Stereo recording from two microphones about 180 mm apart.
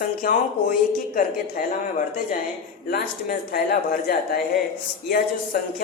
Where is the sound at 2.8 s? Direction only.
55° left (ahead or behind).